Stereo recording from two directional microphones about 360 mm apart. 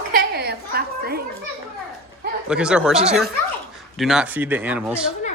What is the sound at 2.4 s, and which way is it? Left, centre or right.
Speech, centre.